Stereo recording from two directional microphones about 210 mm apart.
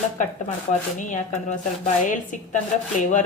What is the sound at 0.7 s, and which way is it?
Speech, 35° left (ahead or behind).